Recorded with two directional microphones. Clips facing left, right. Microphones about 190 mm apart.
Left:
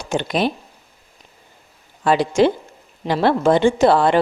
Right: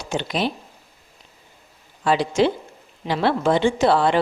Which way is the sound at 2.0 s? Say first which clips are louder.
Left 3 dB; 50° left (ahead or behind).